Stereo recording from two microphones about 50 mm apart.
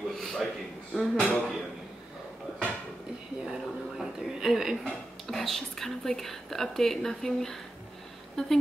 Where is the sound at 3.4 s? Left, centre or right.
Centre.